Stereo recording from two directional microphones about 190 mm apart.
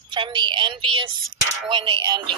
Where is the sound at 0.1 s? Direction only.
25° right (ahead or behind).